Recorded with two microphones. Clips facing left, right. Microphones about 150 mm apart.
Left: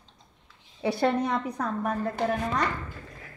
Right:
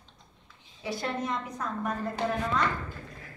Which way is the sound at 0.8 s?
65° left (ahead or behind).